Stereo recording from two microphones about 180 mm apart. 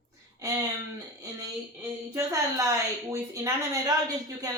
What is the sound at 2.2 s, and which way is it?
Speech, 20° right (ahead or behind).